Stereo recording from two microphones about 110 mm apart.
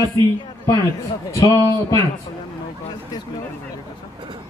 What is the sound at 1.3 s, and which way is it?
Speech, 30° left (ahead or behind).